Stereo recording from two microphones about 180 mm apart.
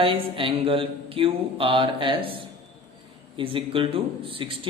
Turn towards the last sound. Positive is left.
turn(degrees=-30)  # may be behind; listen again after turning